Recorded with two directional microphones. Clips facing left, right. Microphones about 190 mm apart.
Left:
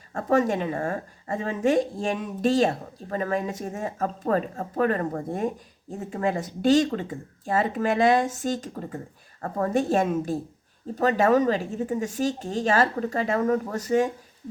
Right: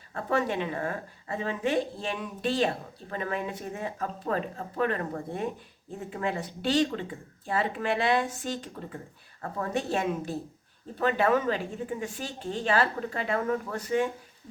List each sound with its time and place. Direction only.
0.1 s speech: 45° left (ahead or behind)